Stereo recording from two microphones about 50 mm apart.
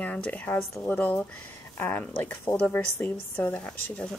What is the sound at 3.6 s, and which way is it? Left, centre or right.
Speech, centre.